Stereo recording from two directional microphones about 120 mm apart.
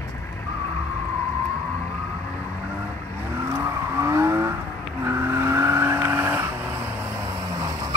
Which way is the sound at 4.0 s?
20° right (ahead or behind).